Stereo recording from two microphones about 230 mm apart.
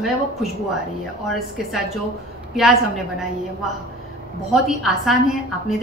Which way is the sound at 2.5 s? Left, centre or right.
Centre.